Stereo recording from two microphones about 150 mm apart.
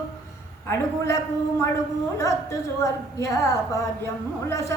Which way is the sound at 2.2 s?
20° left (ahead or behind).